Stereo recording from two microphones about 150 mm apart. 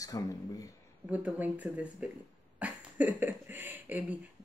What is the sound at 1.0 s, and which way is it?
Speech, 10° right (ahead or behind).